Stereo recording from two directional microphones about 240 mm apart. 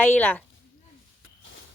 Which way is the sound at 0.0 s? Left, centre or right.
Centre.